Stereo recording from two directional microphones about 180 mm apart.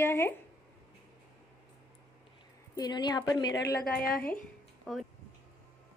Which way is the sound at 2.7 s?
20° left (ahead or behind).